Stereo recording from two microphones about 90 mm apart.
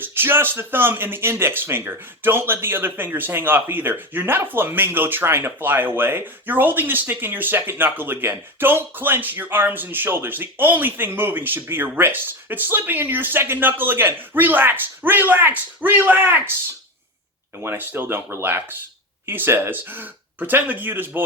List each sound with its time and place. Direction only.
0.0 s speech: 25° right (ahead or behind)
17.6 s speech: 25° right (ahead or behind)